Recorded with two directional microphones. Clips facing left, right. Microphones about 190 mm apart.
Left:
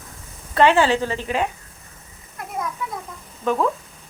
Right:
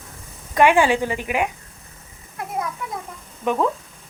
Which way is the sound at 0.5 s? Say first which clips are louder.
Even; 15° right (ahead or behind).